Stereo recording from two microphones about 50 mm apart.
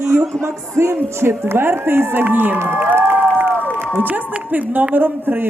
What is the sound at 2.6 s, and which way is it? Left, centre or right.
Speech, right.